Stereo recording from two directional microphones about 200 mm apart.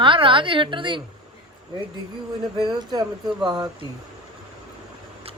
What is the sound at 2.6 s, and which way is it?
A woman's voice, 20° right (ahead or behind).